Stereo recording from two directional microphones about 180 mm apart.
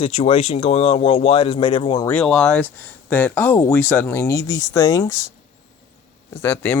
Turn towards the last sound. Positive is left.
turn(degrees=10)  # may be behind; listen again after turning